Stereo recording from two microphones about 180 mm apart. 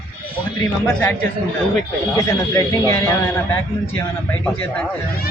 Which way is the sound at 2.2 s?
15° left (ahead or behind).